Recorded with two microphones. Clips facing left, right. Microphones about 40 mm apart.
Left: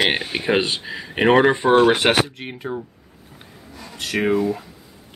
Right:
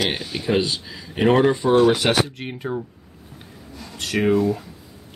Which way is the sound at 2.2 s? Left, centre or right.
Centre.